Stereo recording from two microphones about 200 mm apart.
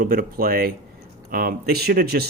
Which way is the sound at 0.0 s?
45° right (ahead or behind).